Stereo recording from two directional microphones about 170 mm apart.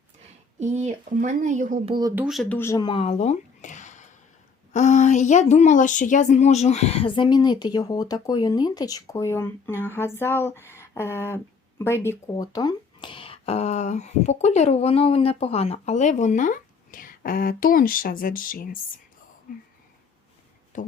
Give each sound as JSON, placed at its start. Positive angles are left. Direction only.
{"t": 0.6, "sound": "speech", "side_deg": -40}
{"t": 2.1, "sound": "speech", "side_deg": 0}
{"t": 2.6, "sound": "speech", "side_deg": 20}
{"t": 20.7, "sound": "speech", "side_deg": 50}